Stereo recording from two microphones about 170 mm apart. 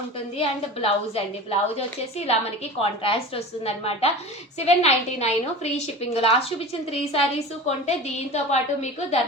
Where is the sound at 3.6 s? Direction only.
35° left (ahead or behind).